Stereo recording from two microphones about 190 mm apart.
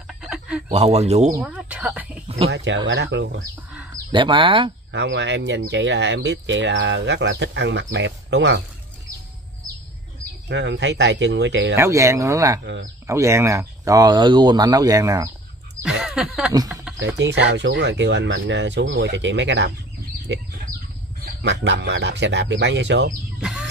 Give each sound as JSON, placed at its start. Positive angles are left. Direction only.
{"t": 0.2, "sound": "a sound", "side_deg": 0}
{"t": 0.7, "sound": "speech", "side_deg": -35}
{"t": 1.3, "sound": "a sound", "side_deg": -5}
{"t": 2.2, "sound": "a sound", "side_deg": -30}
{"t": 2.5, "sound": "speech", "side_deg": -70}
{"t": 4.1, "sound": "speech", "side_deg": -25}
{"t": 4.9, "sound": "speech", "side_deg": -65}
{"t": 10.5, "sound": "speech", "side_deg": -70}
{"t": 11.7, "sound": "speech", "side_deg": -15}
{"t": 15.8, "sound": "a sound", "side_deg": -5}
{"t": 17.0, "sound": "speech", "side_deg": -65}
{"t": 23.4, "sound": "bird", "side_deg": -5}